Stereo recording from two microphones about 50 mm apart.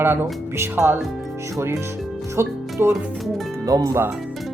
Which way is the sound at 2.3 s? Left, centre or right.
Right.